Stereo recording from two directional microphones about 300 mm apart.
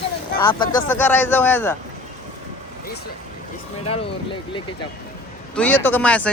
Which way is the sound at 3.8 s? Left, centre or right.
Centre.